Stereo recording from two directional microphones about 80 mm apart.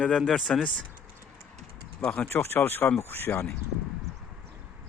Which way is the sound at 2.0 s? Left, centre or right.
Left.